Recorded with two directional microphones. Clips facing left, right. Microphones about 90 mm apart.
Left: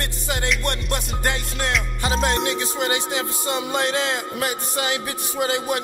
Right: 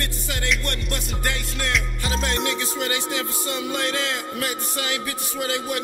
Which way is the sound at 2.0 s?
35° left (ahead or behind).